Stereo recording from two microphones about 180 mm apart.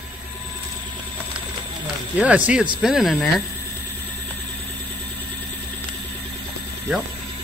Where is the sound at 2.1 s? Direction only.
5° right (ahead or behind).